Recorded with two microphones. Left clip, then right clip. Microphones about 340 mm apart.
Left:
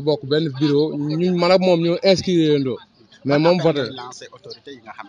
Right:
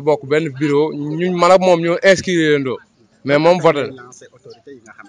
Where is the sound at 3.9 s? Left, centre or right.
Centre.